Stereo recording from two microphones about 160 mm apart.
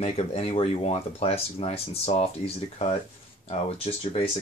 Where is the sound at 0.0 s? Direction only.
40° left (ahead or behind).